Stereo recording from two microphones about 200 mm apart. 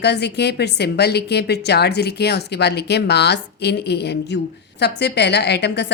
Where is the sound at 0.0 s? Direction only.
55° left (ahead or behind).